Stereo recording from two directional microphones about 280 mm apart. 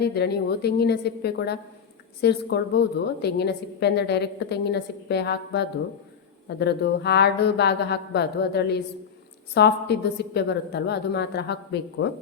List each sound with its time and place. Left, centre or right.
0.0 s a woman's voice: left